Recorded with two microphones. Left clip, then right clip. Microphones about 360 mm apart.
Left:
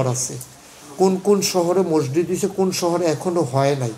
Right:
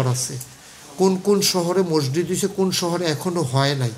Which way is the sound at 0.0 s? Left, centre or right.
Right.